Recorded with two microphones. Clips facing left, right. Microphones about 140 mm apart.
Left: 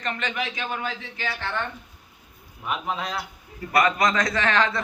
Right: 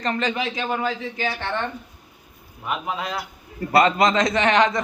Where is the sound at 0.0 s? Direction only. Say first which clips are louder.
Right 5 dB; 35° right (ahead or behind).